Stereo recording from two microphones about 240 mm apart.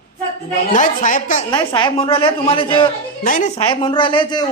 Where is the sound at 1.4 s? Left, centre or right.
Centre.